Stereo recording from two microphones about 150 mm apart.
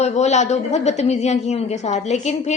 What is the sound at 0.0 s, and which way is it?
A woman's voice, 50° left (ahead or behind).